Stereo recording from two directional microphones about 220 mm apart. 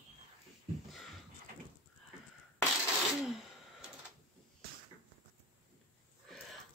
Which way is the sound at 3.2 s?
Centre (ahead or behind).